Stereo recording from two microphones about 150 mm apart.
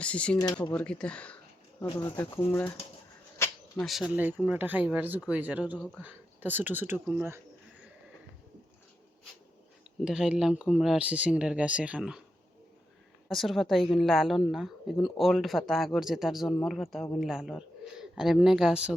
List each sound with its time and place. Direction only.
0.0 s speech: 10° left (ahead or behind)
1.9 s speech: 30° left (ahead or behind)
2.3 s speech: 20° left (ahead or behind)
3.3 s a sound: 15° left (ahead or behind)
3.8 s a woman's voice: centre (ahead or behind)
4.1 s speech: 10° right (ahead or behind)
10.0 s a woman's voice: 5° right (ahead or behind)
13.2 s a woman's voice: centre (ahead or behind)